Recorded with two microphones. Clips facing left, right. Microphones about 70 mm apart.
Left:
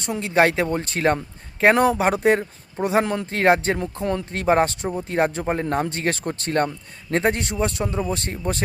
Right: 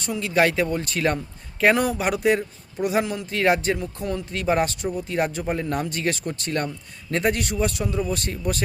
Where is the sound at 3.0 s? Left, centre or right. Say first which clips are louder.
Left 2 dB; left.